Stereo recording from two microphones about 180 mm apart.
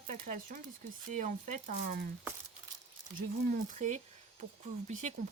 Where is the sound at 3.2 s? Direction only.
45° right (ahead or behind).